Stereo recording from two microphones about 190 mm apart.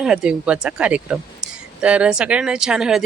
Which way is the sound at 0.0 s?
5° right (ahead or behind).